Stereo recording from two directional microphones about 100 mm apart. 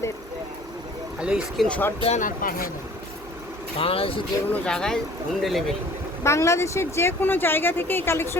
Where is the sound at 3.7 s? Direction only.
75° left (ahead or behind).